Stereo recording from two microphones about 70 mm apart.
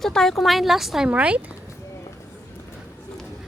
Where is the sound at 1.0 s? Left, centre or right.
Centre.